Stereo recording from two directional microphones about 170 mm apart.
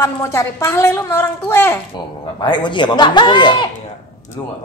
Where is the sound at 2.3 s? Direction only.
25° left (ahead or behind).